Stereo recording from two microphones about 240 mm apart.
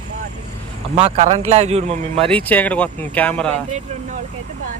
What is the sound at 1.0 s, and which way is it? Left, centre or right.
A man's voice, right.